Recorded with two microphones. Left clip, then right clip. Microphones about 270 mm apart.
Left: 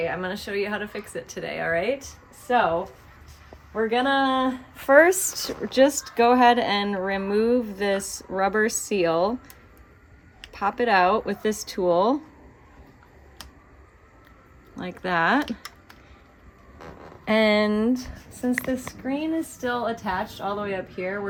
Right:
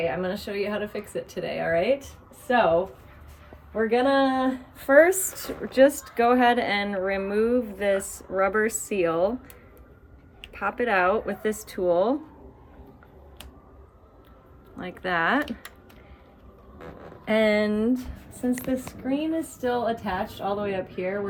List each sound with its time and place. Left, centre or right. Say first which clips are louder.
0.0 s a woman's voice: even; centre
10.5 s a woman's voice: left 3 dB; centre
14.8 s speech: left 2 dB; centre
16.8 s a sound: left 2 dB; left
18.7 s a woman's voice: even; centre